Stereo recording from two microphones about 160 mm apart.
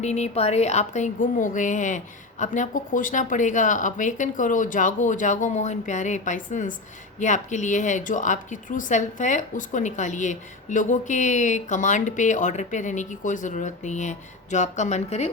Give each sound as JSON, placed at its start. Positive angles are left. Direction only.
{"t": 0.0, "sound": "a woman's voice", "side_deg": 45}